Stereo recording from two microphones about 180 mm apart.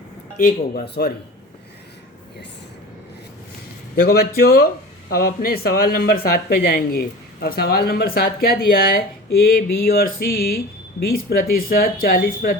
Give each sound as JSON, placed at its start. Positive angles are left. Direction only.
{"t": 0.3, "sound": "speech", "side_deg": 45}
{"t": 3.9, "sound": "speech", "side_deg": 60}